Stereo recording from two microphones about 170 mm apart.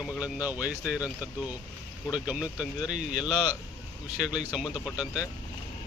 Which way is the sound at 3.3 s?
25° left (ahead or behind).